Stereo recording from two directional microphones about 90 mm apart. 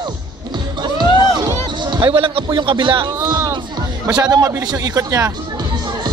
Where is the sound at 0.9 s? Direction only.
50° right (ahead or behind).